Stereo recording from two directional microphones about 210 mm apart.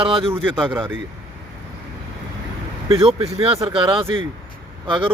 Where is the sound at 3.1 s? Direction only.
30° right (ahead or behind).